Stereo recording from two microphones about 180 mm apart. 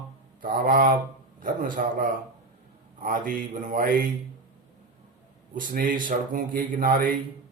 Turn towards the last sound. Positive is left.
turn(degrees=-50)  # may be behind; listen again after turning